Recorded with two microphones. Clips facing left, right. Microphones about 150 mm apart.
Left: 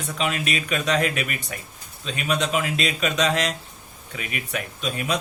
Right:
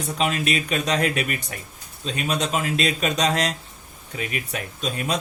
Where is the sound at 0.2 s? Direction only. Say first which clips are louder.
Right 2 dB; 35° right (ahead or behind).